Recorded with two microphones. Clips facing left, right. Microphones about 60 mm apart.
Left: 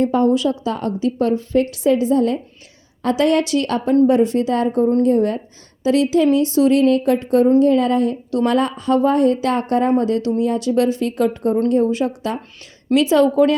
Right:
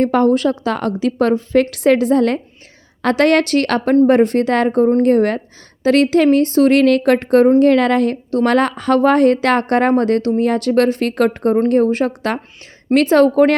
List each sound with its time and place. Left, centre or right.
0.0 s a woman's voice: right
1.7 s a woman's voice: right
7.6 s a woman's voice: right
8.4 s a woman's voice: right